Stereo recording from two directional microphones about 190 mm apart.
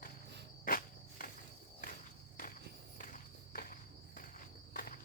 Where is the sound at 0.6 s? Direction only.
50° left (ahead or behind).